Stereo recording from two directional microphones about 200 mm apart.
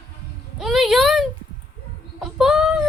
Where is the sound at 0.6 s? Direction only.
Centre (ahead or behind).